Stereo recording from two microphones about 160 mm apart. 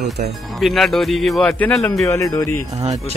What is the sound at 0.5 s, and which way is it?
Speech, centre (ahead or behind).